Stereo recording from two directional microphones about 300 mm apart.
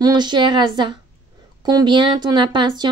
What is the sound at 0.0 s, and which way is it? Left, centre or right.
Speech, centre.